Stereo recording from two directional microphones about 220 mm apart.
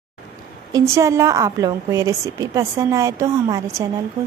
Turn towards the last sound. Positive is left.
turn(degrees=-15)  # may be behind; listen again after turning